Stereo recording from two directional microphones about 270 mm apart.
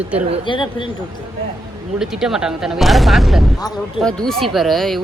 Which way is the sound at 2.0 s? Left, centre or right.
Centre.